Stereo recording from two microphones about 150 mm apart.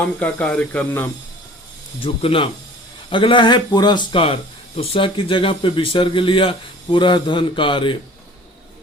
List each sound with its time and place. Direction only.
0.2 s speech: 10° left (ahead or behind)
2.0 s speech: 40° left (ahead or behind)